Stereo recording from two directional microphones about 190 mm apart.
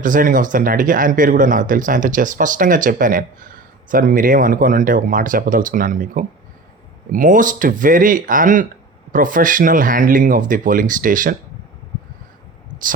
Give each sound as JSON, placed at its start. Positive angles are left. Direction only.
{"t": 0.0, "sound": "speech", "side_deg": -45}